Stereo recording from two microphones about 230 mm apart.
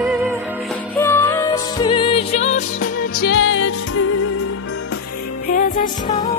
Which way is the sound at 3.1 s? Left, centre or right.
Left.